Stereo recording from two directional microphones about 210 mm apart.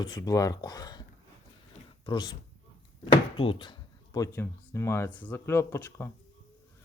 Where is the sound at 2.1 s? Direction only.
20° left (ahead or behind).